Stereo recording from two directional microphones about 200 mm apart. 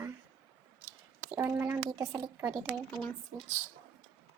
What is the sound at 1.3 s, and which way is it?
A child's voice, 10° right (ahead or behind).